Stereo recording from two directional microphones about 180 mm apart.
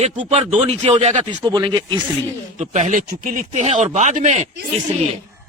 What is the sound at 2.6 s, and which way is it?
Speech, 40° right (ahead or behind).